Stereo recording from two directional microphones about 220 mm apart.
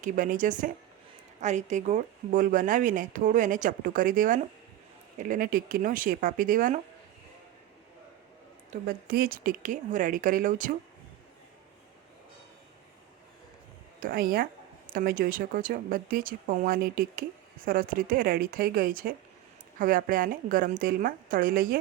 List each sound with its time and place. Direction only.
0.0 s speech: 35° right (ahead or behind)
8.7 s speech: 45° right (ahead or behind)
14.0 s speech: 40° right (ahead or behind)